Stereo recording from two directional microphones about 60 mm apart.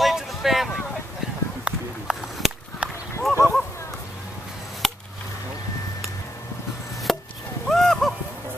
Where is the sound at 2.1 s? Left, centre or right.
Centre.